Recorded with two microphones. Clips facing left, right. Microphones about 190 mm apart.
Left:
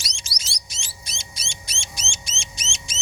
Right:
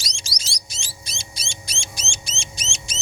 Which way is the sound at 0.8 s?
30° right (ahead or behind).